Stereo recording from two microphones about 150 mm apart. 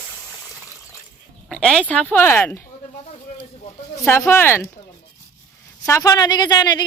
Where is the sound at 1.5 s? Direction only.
5° left (ahead or behind).